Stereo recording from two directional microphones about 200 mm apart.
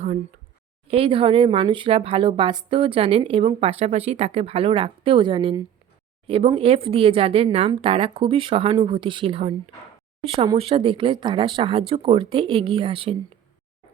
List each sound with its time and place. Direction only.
0.9 s speech: 25° right (ahead or behind)